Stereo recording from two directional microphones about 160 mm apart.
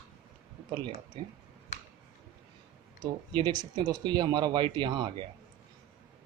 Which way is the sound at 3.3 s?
30° right (ahead or behind).